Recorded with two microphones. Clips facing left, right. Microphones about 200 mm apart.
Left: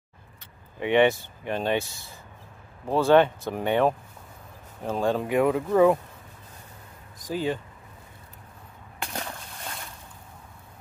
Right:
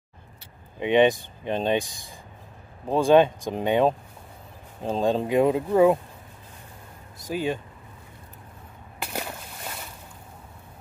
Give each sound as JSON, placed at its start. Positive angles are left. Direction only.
{"t": 0.7, "sound": "speech", "side_deg": -20}
{"t": 4.9, "sound": "speech", "side_deg": -20}
{"t": 5.7, "sound": "speech", "side_deg": -15}
{"t": 7.2, "sound": "speech", "side_deg": -15}
{"t": 9.0, "sound": "boat", "side_deg": -5}